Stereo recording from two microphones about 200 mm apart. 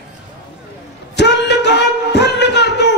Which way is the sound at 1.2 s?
60° left (ahead or behind).